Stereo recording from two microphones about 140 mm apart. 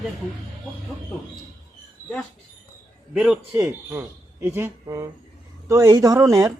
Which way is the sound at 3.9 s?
20° right (ahead or behind).